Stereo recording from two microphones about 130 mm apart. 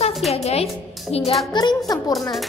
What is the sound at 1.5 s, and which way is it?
Speech, 35° left (ahead or behind).